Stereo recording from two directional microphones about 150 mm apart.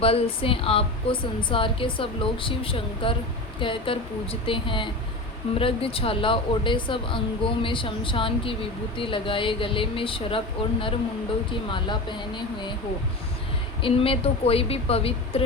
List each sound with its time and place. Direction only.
0.0 s a woman's voice: 40° left (ahead or behind)
13.8 s a woman's voice: 40° left (ahead or behind)